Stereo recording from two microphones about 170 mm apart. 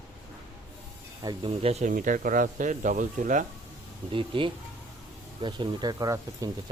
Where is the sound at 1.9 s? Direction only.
50° right (ahead or behind).